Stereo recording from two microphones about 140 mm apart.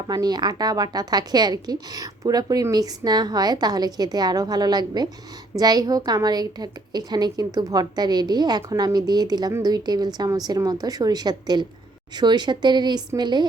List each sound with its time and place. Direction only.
0.1 s a woman's voice: 30° right (ahead or behind)